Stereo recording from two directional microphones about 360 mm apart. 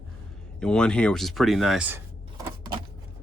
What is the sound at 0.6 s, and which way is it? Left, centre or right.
Speech, centre.